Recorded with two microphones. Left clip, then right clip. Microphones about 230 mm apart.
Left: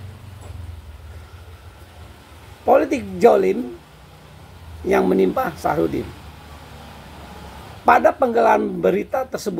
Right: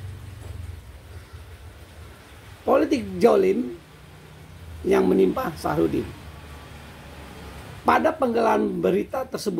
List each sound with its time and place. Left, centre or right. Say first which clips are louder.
2.6 s speech: left 4 dB; centre
4.8 s speech: left 2 dB; centre
7.8 s speech: left 6 dB; centre